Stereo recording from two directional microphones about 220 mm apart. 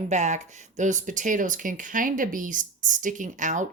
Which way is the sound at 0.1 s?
30° right (ahead or behind).